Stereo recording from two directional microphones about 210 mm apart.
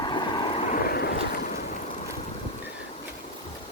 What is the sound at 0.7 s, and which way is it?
Ocean, 45° left (ahead or behind).